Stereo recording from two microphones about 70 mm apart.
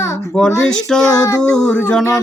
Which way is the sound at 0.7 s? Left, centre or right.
Centre.